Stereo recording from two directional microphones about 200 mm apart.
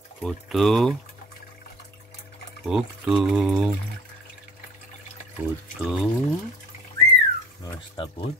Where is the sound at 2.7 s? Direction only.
5° right (ahead or behind).